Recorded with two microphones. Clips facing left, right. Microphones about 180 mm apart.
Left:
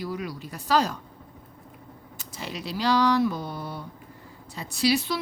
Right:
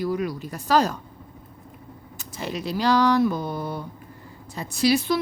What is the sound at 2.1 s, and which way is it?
A woman's voice, 50° right (ahead or behind).